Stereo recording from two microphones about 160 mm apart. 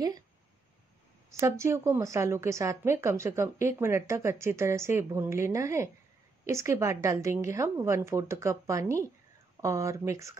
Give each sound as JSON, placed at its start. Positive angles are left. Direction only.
{"t": 1.4, "sound": "a woman's voice", "side_deg": -15}